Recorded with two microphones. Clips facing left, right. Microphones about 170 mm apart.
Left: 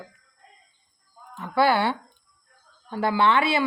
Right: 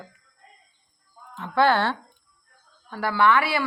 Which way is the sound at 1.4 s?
10° left (ahead or behind).